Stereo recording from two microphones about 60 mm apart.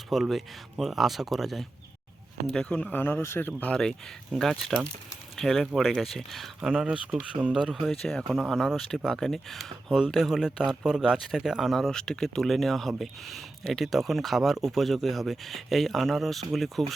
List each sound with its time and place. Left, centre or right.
0.1 s speech: centre
2.5 s speech: centre
2.9 s speech: left
4.4 s speech: centre
6.6 s speech: centre
7.7 s speech: centre
11.9 s speech: centre